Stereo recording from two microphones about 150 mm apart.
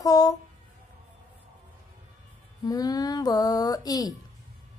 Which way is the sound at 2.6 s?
25° left (ahead or behind).